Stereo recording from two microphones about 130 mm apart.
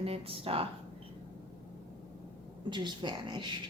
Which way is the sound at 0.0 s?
45° right (ahead or behind).